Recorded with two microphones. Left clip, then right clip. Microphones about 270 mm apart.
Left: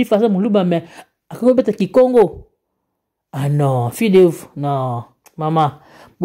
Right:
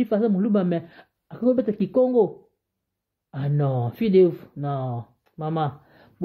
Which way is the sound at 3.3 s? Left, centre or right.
Centre.